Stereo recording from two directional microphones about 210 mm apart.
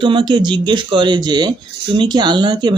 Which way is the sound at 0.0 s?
20° right (ahead or behind).